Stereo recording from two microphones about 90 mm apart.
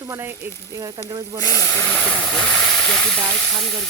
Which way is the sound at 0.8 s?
40° right (ahead or behind).